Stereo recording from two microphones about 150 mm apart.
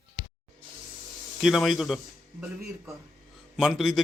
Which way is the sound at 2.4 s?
20° right (ahead or behind).